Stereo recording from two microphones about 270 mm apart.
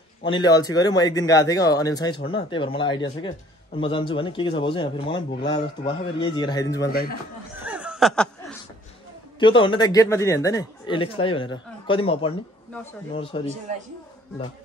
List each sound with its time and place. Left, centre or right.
0.2 s a man's voice: centre
6.9 s speech: left
7.6 s chuckle: centre
9.4 s a man's voice: centre